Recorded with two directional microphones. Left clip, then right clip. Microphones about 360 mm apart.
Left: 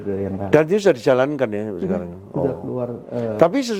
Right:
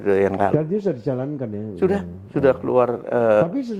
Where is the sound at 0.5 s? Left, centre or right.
Centre.